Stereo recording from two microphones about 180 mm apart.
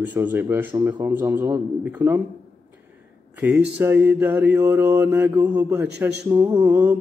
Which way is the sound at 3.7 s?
10° right (ahead or behind).